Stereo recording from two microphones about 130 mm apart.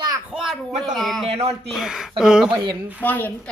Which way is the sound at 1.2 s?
50° right (ahead or behind).